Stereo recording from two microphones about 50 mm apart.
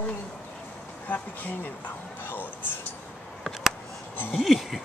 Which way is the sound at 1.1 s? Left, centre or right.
Left.